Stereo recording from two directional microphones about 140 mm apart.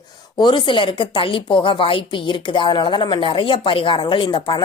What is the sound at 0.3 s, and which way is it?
A woman's voice, 35° left (ahead or behind).